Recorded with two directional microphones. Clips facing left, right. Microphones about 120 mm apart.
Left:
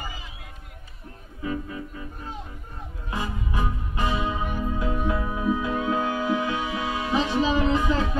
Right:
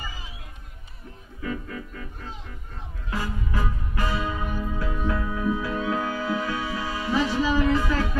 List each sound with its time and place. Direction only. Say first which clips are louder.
1.4 s music: left 2 dB; 20° left (ahead or behind)
3.1 s music: even; 20° left (ahead or behind)